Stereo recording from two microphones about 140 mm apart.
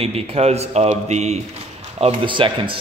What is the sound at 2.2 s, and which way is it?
Speech, 35° right (ahead or behind).